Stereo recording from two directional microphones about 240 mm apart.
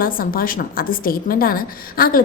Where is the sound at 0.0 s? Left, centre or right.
Left.